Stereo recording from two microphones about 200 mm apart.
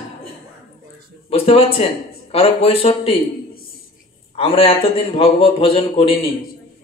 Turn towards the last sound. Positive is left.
turn(degrees=30)  # may be behind; listen again after turning